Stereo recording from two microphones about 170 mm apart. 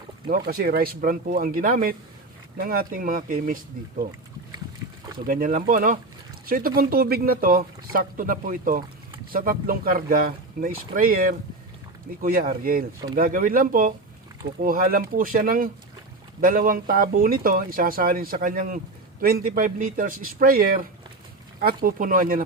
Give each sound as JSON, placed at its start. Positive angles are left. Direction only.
{"t": 0.3, "sound": "speech", "side_deg": -65}
{"t": 5.2, "sound": "speech", "side_deg": -55}